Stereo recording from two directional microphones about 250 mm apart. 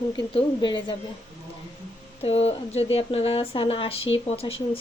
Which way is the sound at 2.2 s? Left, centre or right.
Left.